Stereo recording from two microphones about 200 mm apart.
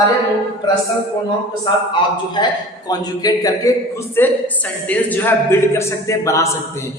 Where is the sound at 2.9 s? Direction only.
20° left (ahead or behind).